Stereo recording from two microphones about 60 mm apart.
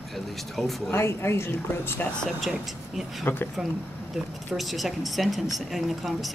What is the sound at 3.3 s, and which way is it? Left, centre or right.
Speech, left.